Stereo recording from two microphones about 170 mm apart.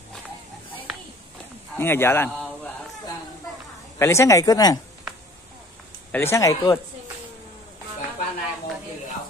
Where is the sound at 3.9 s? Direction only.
15° left (ahead or behind).